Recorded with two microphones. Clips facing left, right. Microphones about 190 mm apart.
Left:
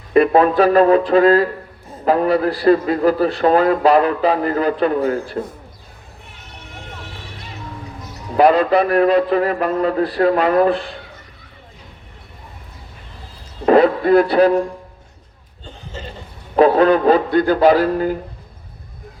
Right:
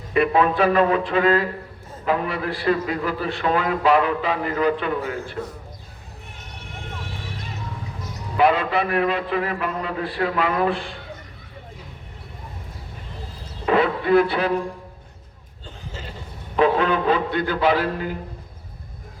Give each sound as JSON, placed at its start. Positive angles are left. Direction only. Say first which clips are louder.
{"t": 0.1, "sound": "a man's voice", "louder": "left 6 dB", "side_deg": 40}
{"t": 8.4, "sound": "a man's voice", "louder": "left 6 dB", "side_deg": 40}
{"t": 13.7, "sound": "a sound", "louder": "left 7 dB", "side_deg": 40}
{"t": 16.6, "sound": "a man's voice", "louder": "left 7 dB", "side_deg": 40}